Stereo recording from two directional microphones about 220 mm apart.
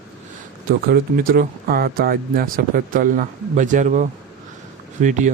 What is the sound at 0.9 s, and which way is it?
Speech, 40° right (ahead or behind).